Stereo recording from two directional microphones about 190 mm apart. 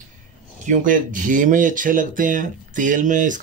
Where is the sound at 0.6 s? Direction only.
40° right (ahead or behind).